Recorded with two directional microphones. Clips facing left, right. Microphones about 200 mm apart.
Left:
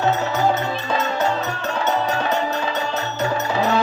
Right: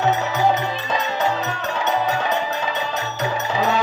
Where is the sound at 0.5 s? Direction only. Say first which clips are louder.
Left 1 dB; 15° right (ahead or behind).